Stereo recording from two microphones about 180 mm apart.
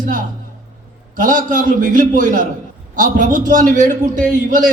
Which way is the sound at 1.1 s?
45° right (ahead or behind).